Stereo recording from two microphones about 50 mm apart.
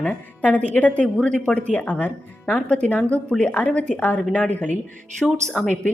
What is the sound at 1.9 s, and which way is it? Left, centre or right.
Speech, left.